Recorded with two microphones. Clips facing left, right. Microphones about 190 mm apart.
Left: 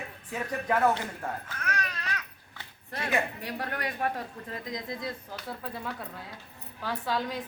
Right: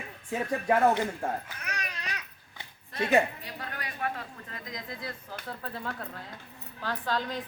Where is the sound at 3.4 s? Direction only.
60° left (ahead or behind).